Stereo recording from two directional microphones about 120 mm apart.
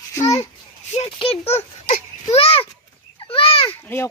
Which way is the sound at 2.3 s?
50° left (ahead or behind).